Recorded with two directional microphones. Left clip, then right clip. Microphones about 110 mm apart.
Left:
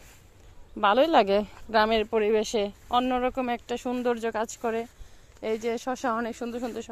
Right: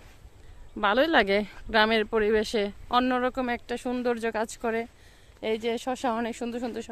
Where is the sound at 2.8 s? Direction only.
35° right (ahead or behind).